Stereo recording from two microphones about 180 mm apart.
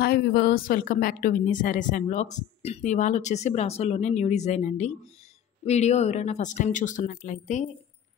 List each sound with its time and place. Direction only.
0.0 s speech: 60° left (ahead or behind); by 7.6 s 45° left (ahead or behind)